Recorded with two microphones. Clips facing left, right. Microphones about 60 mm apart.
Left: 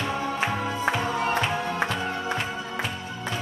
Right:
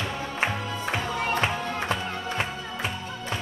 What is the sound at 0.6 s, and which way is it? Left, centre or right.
Music, left.